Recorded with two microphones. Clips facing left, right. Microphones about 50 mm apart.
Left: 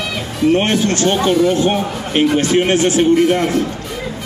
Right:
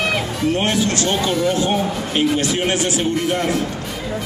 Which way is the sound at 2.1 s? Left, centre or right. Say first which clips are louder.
Left 6 dB; left.